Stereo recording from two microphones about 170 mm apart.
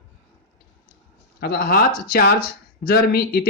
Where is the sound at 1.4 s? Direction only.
60° left (ahead or behind).